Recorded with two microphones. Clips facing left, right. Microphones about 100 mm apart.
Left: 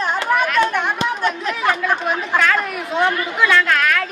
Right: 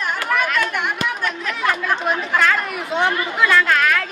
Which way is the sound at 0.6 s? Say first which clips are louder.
Left 3 dB; 30° left (ahead or behind).